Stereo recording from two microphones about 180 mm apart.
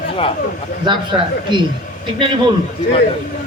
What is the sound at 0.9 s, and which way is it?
Speech, 25° right (ahead or behind).